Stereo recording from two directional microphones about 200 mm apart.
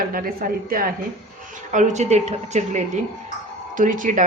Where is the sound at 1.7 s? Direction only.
35° right (ahead or behind).